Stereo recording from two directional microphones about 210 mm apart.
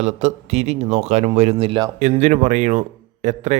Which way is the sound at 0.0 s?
30° right (ahead or behind).